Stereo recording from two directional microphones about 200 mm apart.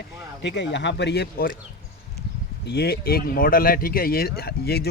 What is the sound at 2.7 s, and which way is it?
Speech, 55° left (ahead or behind).